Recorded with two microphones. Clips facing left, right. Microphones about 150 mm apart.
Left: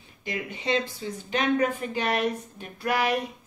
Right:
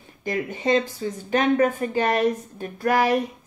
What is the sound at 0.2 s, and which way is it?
A woman's voice, 45° right (ahead or behind).